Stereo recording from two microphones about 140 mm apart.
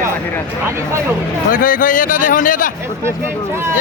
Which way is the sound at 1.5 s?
75° left (ahead or behind).